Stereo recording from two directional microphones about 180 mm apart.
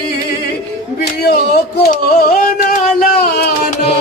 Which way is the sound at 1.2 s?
60° left (ahead or behind).